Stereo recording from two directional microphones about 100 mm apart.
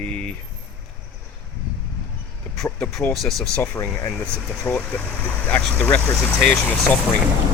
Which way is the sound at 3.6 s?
30° left (ahead or behind).